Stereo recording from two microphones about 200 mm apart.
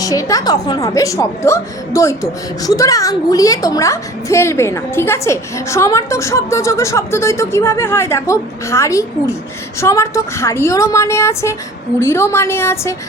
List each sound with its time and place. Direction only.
0.0 s a woman's voice: 15° left (ahead or behind)